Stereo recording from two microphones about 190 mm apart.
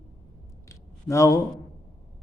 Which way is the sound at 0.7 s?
15° left (ahead or behind).